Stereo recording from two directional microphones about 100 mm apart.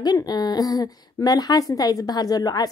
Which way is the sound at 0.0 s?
40° left (ahead or behind).